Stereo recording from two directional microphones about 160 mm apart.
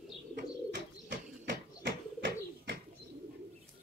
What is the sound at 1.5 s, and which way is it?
Bird, 80° right.